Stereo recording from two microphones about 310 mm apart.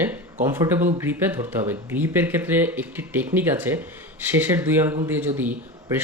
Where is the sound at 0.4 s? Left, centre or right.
Centre.